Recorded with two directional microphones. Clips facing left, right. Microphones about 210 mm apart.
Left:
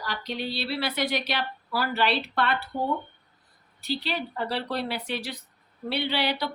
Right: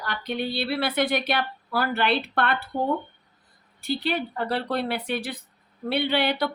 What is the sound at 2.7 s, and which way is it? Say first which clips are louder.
Speech: right 4 dB; 35° right (ahead or behind).